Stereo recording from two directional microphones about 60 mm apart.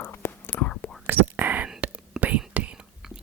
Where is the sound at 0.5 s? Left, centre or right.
Left.